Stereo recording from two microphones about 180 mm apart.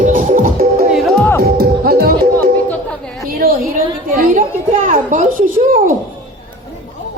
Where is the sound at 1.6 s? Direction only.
60° right (ahead or behind).